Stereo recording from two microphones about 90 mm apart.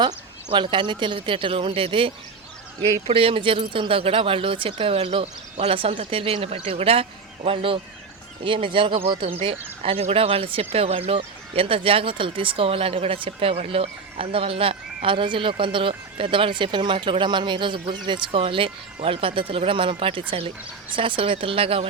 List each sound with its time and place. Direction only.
0.5 s speech: 65° right (ahead or behind)
3.1 s speech: 90° right
8.4 s speech: 80° right
9.0 s speech: 90° right